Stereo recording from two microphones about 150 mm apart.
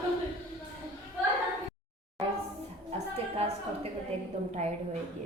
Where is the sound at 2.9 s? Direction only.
40° right (ahead or behind).